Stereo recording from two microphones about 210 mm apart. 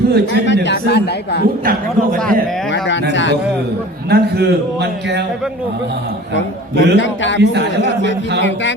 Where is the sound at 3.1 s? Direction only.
60° left (ahead or behind).